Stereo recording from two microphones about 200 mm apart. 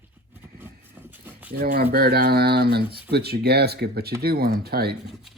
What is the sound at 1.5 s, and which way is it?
Speech, 50° right (ahead or behind).